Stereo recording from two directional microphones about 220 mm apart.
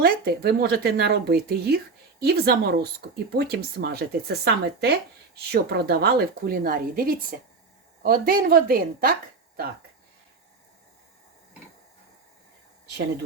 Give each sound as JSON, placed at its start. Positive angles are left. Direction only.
{"t": 0.0, "sound": "a woman's voice", "side_deg": -45}